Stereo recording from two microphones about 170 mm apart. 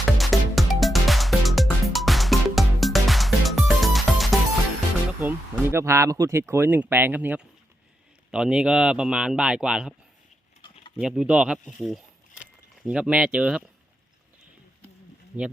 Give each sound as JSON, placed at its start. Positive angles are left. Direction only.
{"t": 0.2, "sound": "music", "side_deg": 0}
{"t": 5.2, "sound": "speech", "side_deg": -15}
{"t": 10.6, "sound": "a sound", "side_deg": 30}
{"t": 11.0, "sound": "speech", "side_deg": -5}
{"t": 11.8, "sound": "a sound", "side_deg": 0}
{"t": 15.3, "sound": "speech", "side_deg": -5}